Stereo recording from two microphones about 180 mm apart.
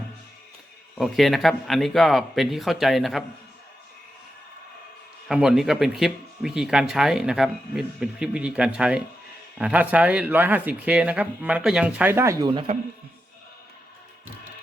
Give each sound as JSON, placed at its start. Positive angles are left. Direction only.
{"t": 0.9, "sound": "speech", "side_deg": 0}
{"t": 5.3, "sound": "speech", "side_deg": -5}